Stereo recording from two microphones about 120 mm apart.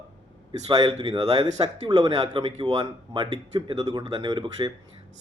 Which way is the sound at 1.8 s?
35° right (ahead or behind).